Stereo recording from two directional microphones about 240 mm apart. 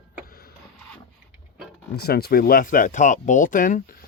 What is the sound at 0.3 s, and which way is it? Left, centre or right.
Printer, left.